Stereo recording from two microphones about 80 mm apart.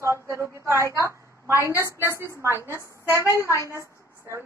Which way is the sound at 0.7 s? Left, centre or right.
Right.